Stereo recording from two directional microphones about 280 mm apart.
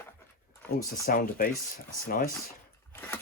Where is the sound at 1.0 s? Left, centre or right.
Left.